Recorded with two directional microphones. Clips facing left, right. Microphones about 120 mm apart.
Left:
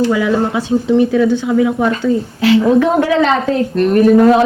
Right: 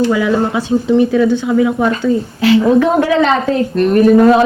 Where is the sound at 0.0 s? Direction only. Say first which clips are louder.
Right 1 dB; 20° right (ahead or behind).